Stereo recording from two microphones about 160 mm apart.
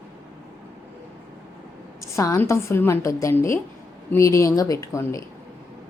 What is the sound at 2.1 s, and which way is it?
A woman's voice, 20° left (ahead or behind).